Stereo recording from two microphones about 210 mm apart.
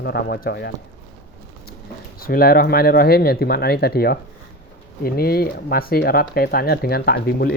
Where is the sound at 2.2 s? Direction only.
45° left (ahead or behind).